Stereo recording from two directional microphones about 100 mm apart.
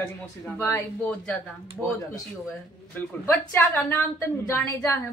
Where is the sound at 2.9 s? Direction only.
25° left (ahead or behind).